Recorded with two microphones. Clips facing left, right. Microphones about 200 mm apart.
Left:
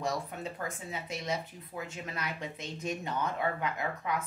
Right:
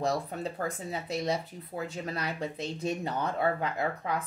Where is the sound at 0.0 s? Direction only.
35° right (ahead or behind).